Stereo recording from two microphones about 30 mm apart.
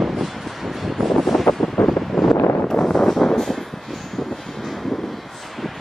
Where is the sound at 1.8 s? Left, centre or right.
Left.